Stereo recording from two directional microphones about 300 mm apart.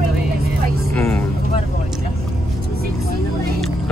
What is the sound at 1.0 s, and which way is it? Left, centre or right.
Vehicle, centre.